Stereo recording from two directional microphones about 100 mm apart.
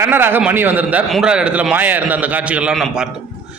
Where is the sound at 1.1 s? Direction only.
5° right (ahead or behind).